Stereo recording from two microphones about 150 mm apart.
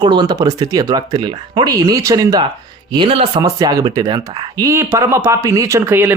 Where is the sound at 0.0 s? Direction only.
30° right (ahead or behind).